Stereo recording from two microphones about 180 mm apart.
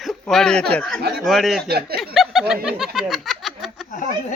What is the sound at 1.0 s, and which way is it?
Speech, 60° right (ahead or behind).